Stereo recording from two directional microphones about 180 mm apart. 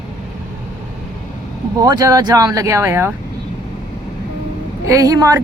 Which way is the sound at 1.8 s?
20° right (ahead or behind).